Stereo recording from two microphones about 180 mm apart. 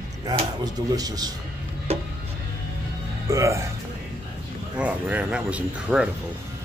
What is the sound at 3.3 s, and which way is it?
Speech, 15° right (ahead or behind).